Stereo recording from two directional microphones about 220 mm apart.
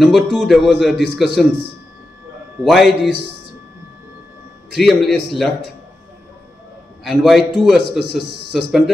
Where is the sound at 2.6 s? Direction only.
Centre (ahead or behind).